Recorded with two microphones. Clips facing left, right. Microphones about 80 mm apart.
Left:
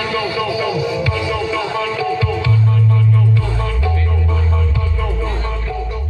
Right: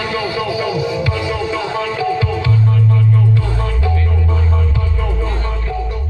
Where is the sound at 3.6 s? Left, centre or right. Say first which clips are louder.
Right 1 dB; right.